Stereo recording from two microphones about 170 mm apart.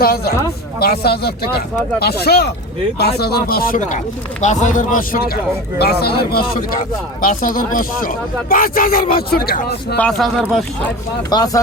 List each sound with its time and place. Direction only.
0.0 s speech: 65° left (ahead or behind)
5.8 s speech: 70° left (ahead or behind)
7.2 s speech: 50° left (ahead or behind)
10.0 s speech: centre (ahead or behind)
11.3 s speech: 20° left (ahead or behind)